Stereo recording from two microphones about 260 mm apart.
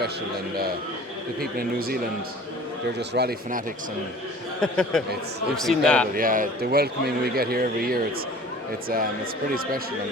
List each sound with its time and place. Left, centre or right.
0.5 s speech: right
3.1 s speech: right
4.6 s a man's voice: centre
6.1 s speech: right